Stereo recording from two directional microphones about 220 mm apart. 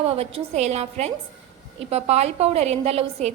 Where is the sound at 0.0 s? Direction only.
25° right (ahead or behind).